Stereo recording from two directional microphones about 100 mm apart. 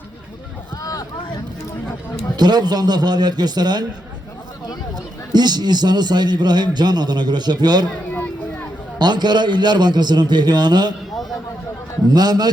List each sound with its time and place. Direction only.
0.8 s vehicle: 35° left (ahead or behind)
2.3 s a man's voice: 45° right (ahead or behind)
5.3 s a man's voice: 45° right (ahead or behind)
9.0 s a man's voice: 45° right (ahead or behind)
12.0 s a man's voice: 40° right (ahead or behind)